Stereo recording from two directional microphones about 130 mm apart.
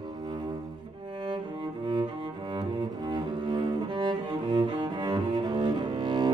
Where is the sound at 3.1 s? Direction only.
35° right (ahead or behind).